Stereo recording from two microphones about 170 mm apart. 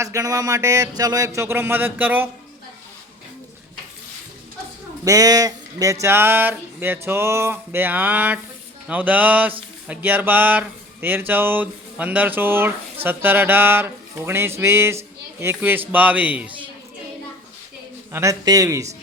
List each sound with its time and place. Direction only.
0.0 s speech: 20° right (ahead or behind)
5.0 s a sound: 20° right (ahead or behind)
18.1 s speech: 15° right (ahead or behind)